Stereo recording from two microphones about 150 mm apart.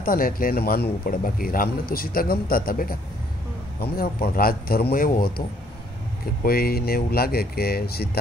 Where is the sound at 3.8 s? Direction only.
90° left.